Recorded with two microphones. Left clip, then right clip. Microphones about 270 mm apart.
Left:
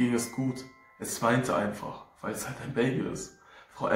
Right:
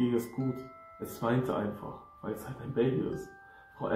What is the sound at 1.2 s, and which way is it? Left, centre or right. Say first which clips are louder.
Speech: left 5 dB; left.